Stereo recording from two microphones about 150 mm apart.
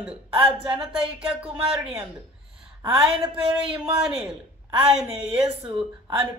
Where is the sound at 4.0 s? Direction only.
5° right (ahead or behind).